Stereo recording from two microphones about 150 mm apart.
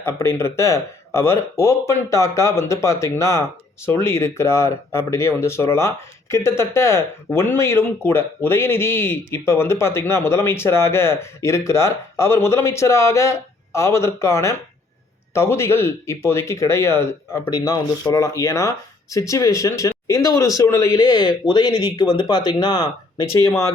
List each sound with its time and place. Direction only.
0.0 s a man's voice: 20° left (ahead or behind)